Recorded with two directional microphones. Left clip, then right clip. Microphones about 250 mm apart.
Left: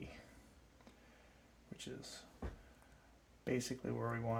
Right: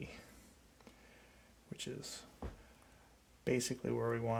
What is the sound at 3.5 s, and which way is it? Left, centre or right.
Speech, right.